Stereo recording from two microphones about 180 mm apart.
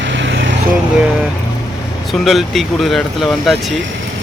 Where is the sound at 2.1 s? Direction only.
Centre (ahead or behind).